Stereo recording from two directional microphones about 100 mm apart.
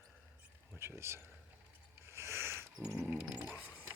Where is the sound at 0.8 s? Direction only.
25° right (ahead or behind).